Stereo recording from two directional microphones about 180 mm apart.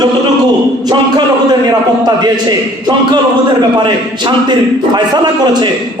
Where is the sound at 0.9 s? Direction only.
20° right (ahead or behind).